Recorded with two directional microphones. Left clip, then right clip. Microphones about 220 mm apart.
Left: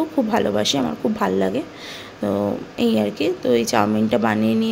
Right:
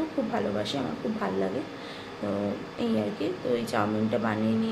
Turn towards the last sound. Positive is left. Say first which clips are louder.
# left 8 dB
turn(degrees=40)  # may be behind; listen again after turning